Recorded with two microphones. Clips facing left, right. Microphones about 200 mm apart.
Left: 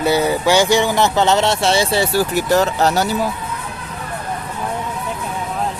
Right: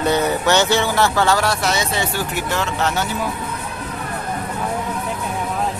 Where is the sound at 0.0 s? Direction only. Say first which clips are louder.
Left 2 dB; 10° left (ahead or behind); by 3.1 s 40° left (ahead or behind).